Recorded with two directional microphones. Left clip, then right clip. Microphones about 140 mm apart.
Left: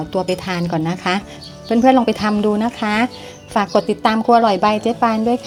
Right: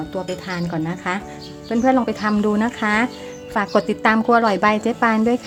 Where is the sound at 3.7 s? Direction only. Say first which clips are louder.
Even; 5° left (ahead or behind).